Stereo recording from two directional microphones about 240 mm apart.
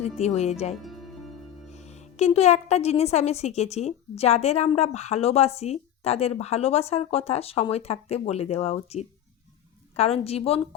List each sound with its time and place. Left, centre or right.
0.2 s a woman's voice: left
0.8 s music: centre
1.7 s a woman's voice: left